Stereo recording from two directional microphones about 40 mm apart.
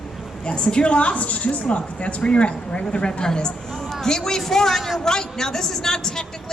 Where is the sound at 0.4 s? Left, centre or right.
Left.